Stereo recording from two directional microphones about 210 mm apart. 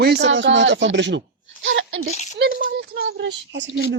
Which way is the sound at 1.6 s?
65° right (ahead or behind).